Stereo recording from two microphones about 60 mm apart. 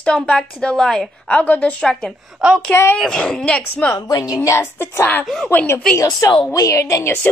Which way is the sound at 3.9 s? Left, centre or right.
Left.